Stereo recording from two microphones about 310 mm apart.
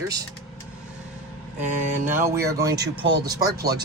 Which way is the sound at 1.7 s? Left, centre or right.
Right.